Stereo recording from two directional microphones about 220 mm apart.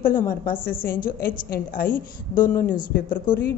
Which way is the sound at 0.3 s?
40° left (ahead or behind).